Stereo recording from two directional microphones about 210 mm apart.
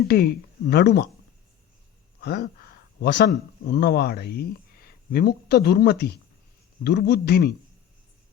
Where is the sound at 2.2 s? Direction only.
50° left (ahead or behind).